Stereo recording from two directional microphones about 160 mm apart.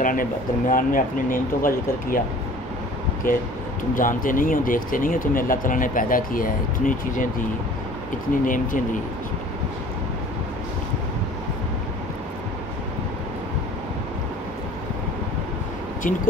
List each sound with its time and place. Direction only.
0.0 s speech: 60° left (ahead or behind)
3.3 s speech: 55° left (ahead or behind)
8.5 s speech: 55° left (ahead or behind)